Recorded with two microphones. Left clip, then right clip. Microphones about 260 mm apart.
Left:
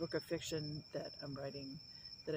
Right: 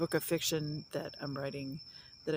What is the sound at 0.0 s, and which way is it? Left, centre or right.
Speech, right.